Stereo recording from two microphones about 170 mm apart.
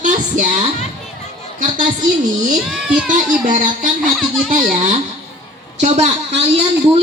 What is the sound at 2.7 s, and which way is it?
Speech, 5° right (ahead or behind).